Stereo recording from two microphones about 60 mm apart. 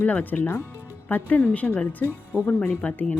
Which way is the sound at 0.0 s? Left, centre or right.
Left.